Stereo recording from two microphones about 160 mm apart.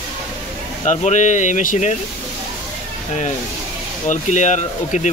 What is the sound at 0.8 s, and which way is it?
Speech, 50° left (ahead or behind).